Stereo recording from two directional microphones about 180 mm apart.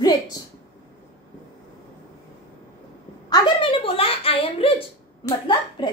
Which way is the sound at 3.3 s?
30° left (ahead or behind).